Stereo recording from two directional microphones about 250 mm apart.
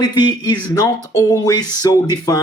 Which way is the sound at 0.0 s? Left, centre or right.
Centre.